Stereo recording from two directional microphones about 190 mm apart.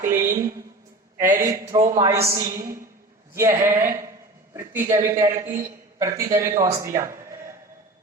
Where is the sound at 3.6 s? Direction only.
10° right (ahead or behind).